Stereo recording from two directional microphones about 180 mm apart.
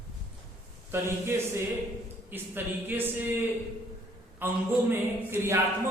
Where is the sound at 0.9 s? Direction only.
15° right (ahead or behind).